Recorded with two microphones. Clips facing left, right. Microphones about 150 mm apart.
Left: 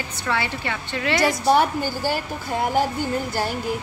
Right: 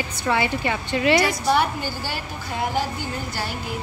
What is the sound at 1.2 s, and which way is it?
Speech, 40° left (ahead or behind).